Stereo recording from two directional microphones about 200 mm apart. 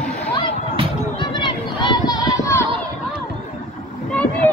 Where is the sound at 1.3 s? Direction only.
20° left (ahead or behind).